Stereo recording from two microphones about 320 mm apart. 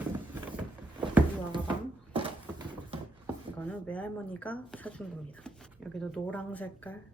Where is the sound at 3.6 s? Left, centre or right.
Centre.